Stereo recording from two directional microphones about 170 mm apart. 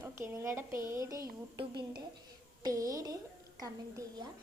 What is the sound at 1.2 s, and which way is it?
Speech, 70° right (ahead or behind).